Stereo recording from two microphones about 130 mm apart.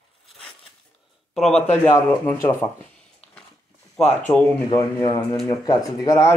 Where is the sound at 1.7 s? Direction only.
15° left (ahead or behind).